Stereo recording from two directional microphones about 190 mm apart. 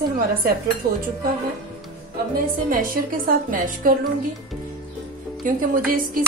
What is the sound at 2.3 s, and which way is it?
Dishes, 50° right (ahead or behind).